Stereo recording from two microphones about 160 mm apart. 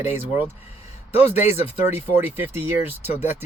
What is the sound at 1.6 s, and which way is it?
Speech, 40° left (ahead or behind).